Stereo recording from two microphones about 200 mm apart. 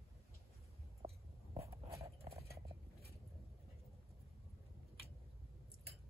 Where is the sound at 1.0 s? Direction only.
20° right (ahead or behind).